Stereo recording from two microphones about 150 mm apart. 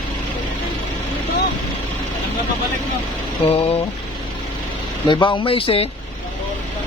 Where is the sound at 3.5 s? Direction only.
40° left (ahead or behind).